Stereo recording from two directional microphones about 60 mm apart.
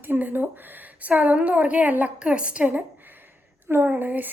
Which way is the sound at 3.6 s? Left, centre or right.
Right.